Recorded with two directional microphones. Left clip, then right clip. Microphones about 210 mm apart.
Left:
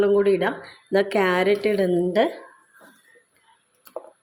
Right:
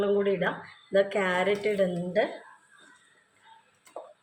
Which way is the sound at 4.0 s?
25° left (ahead or behind).